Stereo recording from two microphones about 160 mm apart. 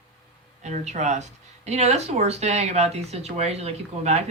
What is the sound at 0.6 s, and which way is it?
Speech, 45° right (ahead or behind).